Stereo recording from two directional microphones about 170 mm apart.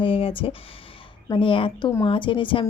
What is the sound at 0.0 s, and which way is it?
A woman's voice, 30° left (ahead or behind).